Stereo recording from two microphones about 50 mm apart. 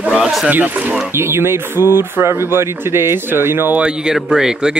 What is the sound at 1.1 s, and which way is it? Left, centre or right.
Speech, right.